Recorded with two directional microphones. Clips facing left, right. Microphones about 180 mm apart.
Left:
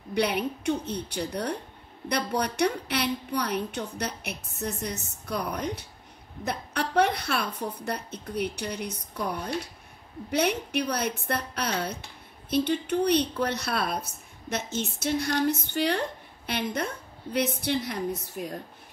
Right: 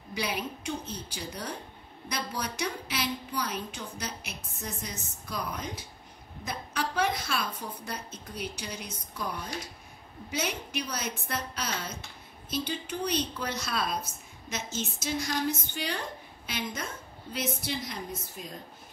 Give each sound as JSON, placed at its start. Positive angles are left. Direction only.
{"t": 0.1, "sound": "a woman's voice", "side_deg": 65}